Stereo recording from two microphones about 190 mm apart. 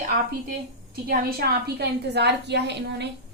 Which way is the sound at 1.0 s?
50° right (ahead or behind).